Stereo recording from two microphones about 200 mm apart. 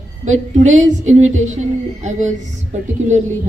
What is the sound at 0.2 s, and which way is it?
Speech, 35° right (ahead or behind).